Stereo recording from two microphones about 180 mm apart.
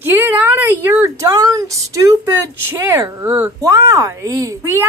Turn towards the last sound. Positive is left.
turn(degrees=-15)  # may be behind; listen again after turning